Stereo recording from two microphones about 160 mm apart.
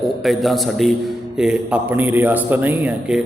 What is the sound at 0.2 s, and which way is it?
A man's voice, centre (ahead or behind).